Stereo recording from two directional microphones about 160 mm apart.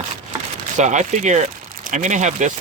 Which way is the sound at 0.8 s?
50° right (ahead or behind).